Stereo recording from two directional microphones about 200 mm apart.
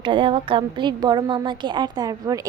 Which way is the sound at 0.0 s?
25° right (ahead or behind).